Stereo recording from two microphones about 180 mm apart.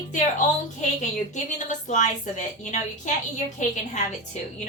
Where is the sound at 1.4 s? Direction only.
45° left (ahead or behind).